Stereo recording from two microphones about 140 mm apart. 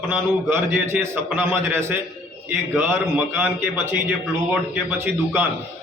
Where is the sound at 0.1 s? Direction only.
15° right (ahead or behind).